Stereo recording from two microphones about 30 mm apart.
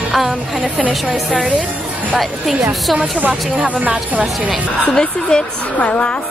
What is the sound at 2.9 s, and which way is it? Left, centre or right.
Speech, right.